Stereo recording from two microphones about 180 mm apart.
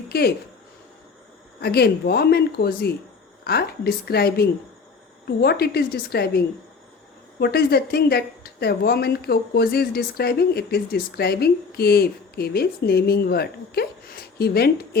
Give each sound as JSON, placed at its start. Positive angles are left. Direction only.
{"t": 0.1, "sound": "speech", "side_deg": 60}
{"t": 1.6, "sound": "a woman's voice", "side_deg": 60}